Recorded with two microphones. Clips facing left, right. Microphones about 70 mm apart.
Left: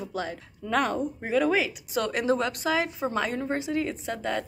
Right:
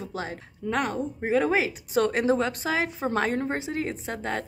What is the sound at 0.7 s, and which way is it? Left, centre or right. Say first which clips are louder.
Speech: left 2 dB; centre.